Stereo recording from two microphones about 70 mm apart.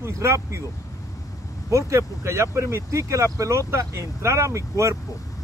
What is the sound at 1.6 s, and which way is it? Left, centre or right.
Speech, right.